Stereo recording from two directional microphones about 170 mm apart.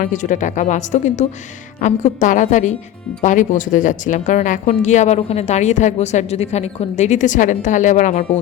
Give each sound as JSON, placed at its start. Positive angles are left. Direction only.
{"t": 0.0, "sound": "a woman's voice", "side_deg": 50}